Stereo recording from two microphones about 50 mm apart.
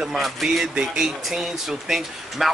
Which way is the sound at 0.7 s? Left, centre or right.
Centre.